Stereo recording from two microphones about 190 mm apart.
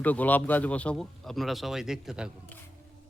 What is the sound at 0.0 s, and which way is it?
Speech, 10° left (ahead or behind).